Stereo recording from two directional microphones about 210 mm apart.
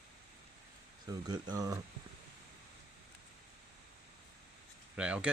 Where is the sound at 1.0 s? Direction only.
20° right (ahead or behind).